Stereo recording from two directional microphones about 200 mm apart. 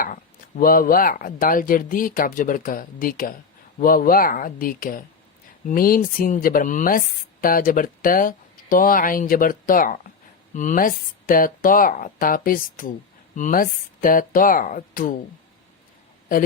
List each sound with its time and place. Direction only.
0.0 s speech: 45° left (ahead or behind)